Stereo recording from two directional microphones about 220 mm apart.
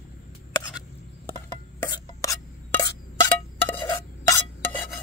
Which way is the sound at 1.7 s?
15° left (ahead or behind).